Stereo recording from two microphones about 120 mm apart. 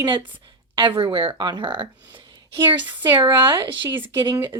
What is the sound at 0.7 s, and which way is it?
Speech, 45° right (ahead or behind).